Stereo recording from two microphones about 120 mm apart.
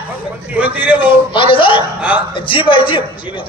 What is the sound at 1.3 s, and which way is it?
A man's voice, 45° left (ahead or behind).